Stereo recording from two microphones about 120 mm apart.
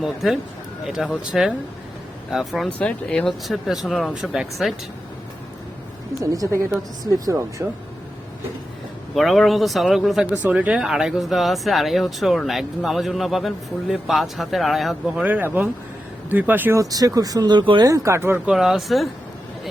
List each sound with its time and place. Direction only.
0.0 s speech: 5° right (ahead or behind)
2.7 s speech: 10° left (ahead or behind)
6.3 s speech: 25° right (ahead or behind)
9.1 s speech: centre (ahead or behind)
10.2 s speech: 10° right (ahead or behind)
16.9 s speech: 30° right (ahead or behind)
17.8 s speech: 25° right (ahead or behind)
18.4 s speech: 5° right (ahead or behind)